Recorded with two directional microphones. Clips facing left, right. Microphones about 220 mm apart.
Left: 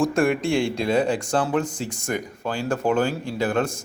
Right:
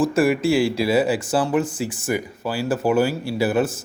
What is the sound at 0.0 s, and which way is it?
A man's voice, 5° right (ahead or behind).